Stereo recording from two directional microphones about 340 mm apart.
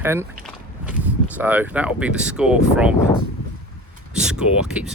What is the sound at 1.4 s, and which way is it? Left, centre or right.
Speech, centre.